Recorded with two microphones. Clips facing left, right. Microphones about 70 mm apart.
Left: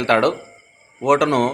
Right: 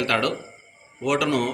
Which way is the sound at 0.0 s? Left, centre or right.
Left.